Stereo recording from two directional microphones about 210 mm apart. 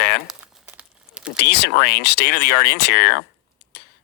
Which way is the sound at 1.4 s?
50° left (ahead or behind).